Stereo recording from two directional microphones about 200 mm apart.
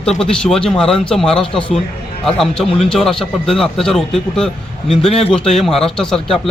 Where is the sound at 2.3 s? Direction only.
Centre (ahead or behind).